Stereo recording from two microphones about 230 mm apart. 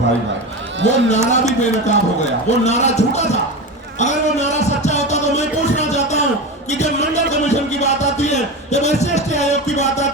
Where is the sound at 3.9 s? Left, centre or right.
Left.